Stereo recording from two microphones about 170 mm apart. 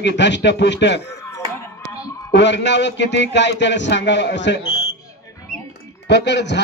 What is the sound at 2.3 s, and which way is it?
A man's voice, 90° left.